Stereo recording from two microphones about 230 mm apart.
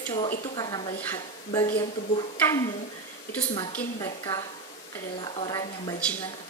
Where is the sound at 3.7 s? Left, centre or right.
Centre.